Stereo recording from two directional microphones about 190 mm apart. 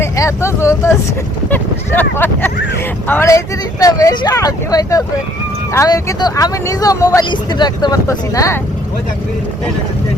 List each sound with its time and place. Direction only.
0.0 s speech: 15° left (ahead or behind)